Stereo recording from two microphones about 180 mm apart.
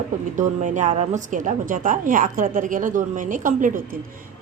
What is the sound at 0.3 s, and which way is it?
A woman's voice, 45° right (ahead or behind).